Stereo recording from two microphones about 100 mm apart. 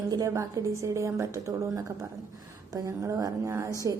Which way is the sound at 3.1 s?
35° right (ahead or behind).